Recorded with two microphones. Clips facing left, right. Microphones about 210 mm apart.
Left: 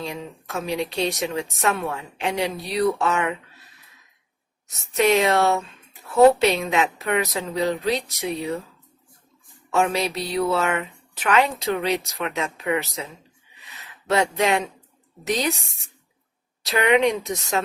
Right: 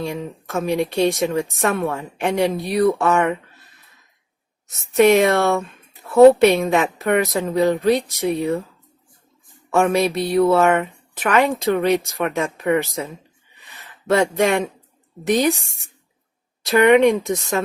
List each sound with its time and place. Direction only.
0.0 s speech: 50° right (ahead or behind)
4.9 s speech: 50° right (ahead or behind)
9.7 s speech: 50° right (ahead or behind)
13.6 s a sound: 50° right (ahead or behind)
15.3 s speech: 50° right (ahead or behind)